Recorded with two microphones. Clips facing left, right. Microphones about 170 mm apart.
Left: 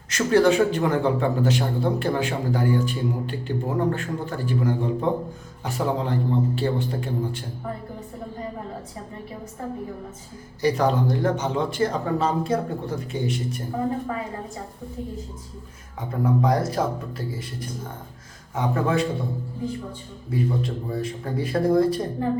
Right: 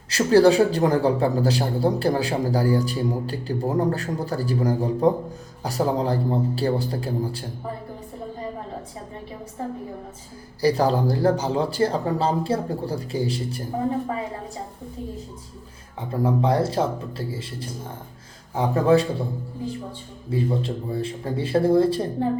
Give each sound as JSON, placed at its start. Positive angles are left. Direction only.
{"t": 0.1, "sound": "a man's voice", "side_deg": -35}
{"t": 10.6, "sound": "a man's voice", "side_deg": -35}
{"t": 16.0, "sound": "a man's voice", "side_deg": -30}
{"t": 20.3, "sound": "speech", "side_deg": -30}